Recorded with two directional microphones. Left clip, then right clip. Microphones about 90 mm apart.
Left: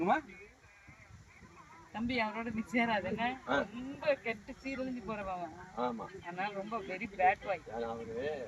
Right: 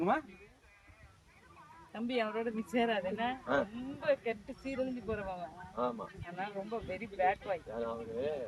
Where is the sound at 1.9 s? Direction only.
40° right (ahead or behind).